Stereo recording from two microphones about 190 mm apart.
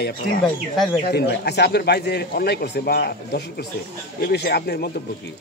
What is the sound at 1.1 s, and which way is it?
A man's voice, 60° left (ahead or behind).